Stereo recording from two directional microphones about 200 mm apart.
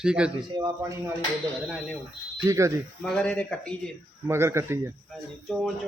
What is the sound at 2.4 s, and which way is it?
Speech, 15° right (ahead or behind).